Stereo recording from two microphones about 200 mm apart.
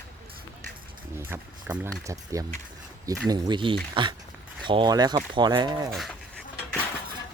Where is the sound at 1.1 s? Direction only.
10° right (ahead or behind).